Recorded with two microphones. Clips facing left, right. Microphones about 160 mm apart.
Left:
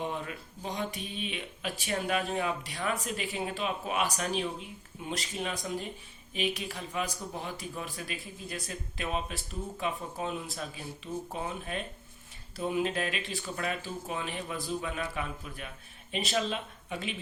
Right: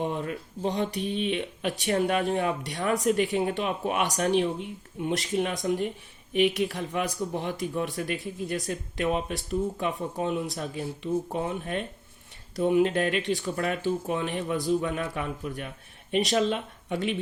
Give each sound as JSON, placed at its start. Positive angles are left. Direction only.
{"t": 0.0, "sound": "speech", "side_deg": -55}